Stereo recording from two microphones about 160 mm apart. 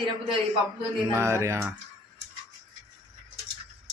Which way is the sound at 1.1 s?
20° right (ahead or behind).